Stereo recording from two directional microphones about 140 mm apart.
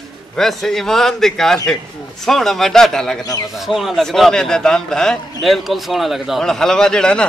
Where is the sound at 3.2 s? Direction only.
25° left (ahead or behind).